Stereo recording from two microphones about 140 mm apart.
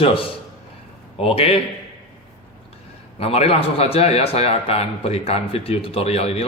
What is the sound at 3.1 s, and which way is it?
A man's voice, 45° left (ahead or behind).